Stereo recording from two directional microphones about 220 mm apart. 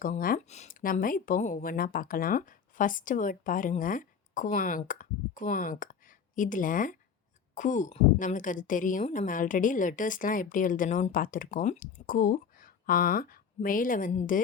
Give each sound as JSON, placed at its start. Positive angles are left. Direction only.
{"t": 0.0, "sound": "speech", "side_deg": 40}